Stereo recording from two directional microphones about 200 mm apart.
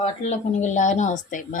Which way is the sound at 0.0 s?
35° left (ahead or behind).